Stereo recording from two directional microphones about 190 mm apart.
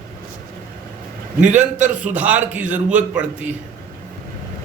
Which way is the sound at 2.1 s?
10° right (ahead or behind).